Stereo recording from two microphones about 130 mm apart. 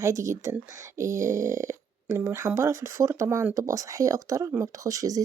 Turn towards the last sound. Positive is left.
turn(degrees=-25)  # may be behind; listen again after turning